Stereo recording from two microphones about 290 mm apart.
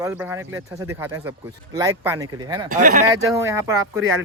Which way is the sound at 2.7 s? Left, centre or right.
Right.